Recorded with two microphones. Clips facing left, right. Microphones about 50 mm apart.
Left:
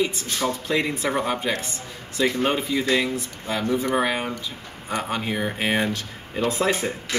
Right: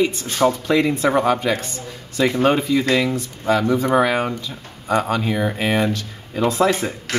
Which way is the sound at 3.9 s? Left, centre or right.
Right.